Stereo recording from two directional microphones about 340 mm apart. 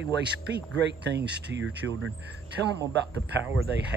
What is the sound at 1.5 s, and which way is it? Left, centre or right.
Speech, right.